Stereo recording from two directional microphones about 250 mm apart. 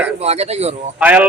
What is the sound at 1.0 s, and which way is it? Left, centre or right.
Speech, centre.